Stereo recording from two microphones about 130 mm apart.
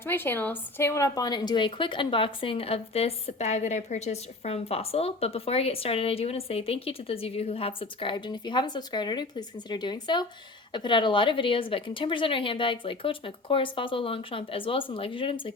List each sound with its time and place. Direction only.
0.0 s a woman's voice: 15° left (ahead or behind); by 15.5 s 40° left (ahead or behind)